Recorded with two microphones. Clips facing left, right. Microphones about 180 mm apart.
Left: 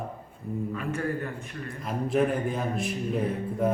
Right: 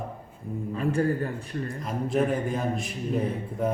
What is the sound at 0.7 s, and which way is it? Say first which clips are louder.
Speech: right 9 dB; 35° right (ahead or behind).